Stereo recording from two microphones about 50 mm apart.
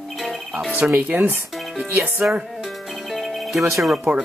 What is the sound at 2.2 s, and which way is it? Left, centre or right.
Speech, right.